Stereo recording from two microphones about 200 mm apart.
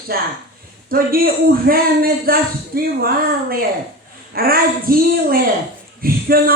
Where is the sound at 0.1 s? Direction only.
45° right (ahead or behind).